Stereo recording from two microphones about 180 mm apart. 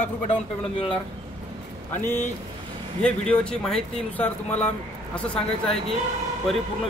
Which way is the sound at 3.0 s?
5° left (ahead or behind).